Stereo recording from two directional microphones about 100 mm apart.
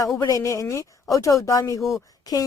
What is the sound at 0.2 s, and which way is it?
Speech, 35° left (ahead or behind).